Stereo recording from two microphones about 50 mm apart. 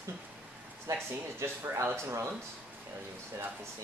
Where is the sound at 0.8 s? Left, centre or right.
Right.